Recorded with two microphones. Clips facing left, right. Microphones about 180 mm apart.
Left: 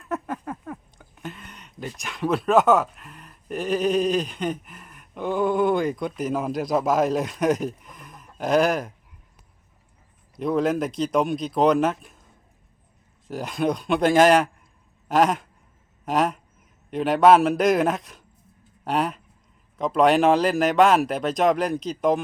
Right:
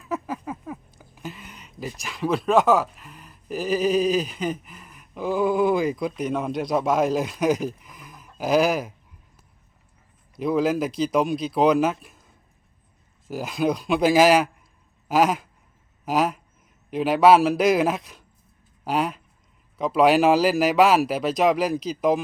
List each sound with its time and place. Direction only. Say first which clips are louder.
0.0 s speech: even; centre (ahead or behind)
10.3 s speech: even; centre (ahead or behind)
13.2 s speech: right 1 dB; 5° right (ahead or behind)
15.0 s a sound: even; 5° right (ahead or behind)
16.0 s speech: even; centre (ahead or behind)